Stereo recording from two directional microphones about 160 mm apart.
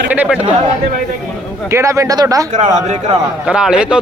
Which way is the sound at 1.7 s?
20° right (ahead or behind).